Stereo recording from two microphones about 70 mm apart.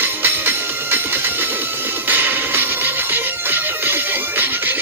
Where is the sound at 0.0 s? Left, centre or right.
Right.